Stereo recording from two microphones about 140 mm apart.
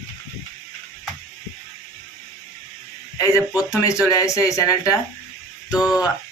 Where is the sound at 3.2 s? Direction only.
20° left (ahead or behind).